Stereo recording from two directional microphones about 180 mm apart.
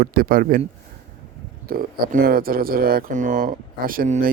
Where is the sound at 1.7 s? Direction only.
55° right (ahead or behind).